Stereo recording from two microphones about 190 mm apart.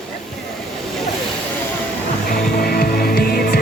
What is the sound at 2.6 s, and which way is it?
Music, 50° left (ahead or behind).